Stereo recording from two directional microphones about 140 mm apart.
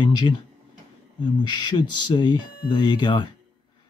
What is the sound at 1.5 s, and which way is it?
Speech, 30° left (ahead or behind).